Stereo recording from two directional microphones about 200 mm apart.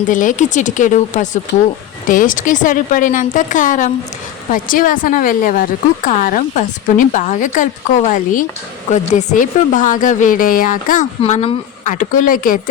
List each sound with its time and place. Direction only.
0.0 s a woman's voice: 40° left (ahead or behind)
11.2 s a woman's voice: 30° left (ahead or behind)